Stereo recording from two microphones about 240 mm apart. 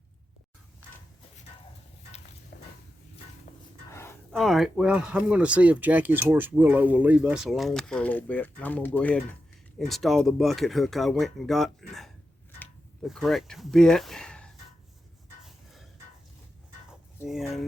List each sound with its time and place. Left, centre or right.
2.5 s walk: left
3.9 s speech: centre
15.4 s a sound: centre
17.2 s speech: centre